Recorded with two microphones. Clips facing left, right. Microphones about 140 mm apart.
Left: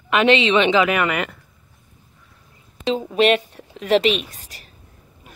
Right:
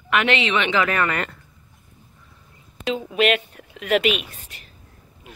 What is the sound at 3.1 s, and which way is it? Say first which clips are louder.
A woman's voice: left 3 dB; 35° left (ahead or behind).